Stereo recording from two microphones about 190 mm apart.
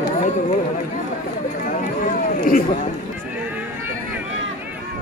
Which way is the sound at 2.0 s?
45° left (ahead or behind).